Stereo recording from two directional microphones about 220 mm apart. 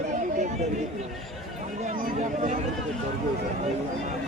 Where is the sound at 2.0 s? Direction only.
35° right (ahead or behind).